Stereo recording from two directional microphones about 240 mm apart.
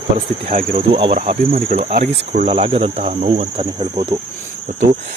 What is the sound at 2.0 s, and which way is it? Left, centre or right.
Speech, right.